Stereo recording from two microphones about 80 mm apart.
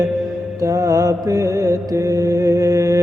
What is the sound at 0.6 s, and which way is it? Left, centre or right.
Mantra, right.